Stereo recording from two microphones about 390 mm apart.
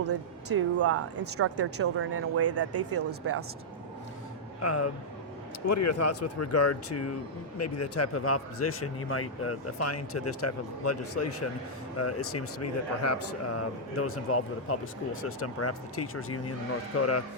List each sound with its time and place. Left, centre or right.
0.0 s speech: right
4.6 s speech: left